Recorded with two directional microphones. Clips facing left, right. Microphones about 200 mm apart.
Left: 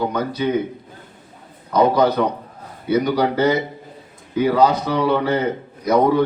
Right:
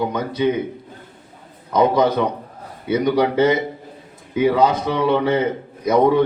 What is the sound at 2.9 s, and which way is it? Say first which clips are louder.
A man's voice: right 1 dB; 20° right (ahead or behind).